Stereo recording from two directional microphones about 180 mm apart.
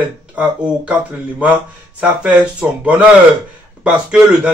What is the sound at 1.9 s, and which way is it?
Speech, 5° right (ahead or behind).